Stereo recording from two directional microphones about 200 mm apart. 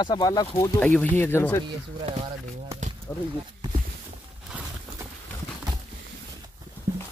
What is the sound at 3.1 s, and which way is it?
Speech, 10° left (ahead or behind).